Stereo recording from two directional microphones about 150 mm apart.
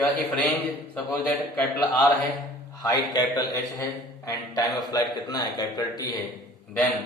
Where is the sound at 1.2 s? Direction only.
10° left (ahead or behind).